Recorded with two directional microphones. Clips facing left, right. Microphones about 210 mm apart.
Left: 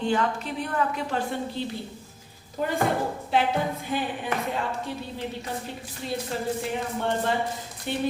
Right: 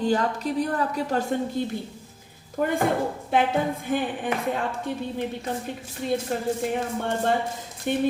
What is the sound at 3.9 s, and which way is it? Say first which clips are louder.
Speech: right 4 dB; 50° right (ahead or behind).